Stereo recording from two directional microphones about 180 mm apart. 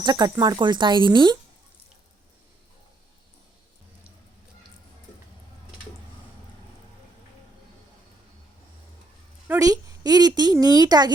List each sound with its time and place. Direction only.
0.0 s a woman's voice: 20° right (ahead or behind)
9.5 s a woman's voice: 20° right (ahead or behind)